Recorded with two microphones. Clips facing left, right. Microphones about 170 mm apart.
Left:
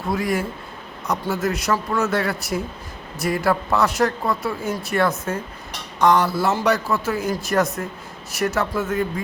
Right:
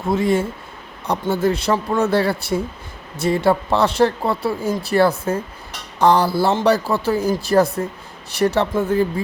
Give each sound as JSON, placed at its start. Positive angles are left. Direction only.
{"t": 0.1, "sound": "a man's voice", "side_deg": -25}